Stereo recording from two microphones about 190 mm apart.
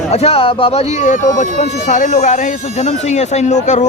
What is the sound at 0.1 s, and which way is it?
Speech, 35° left (ahead or behind).